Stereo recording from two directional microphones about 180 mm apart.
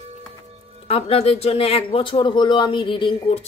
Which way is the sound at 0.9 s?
35° left (ahead or behind).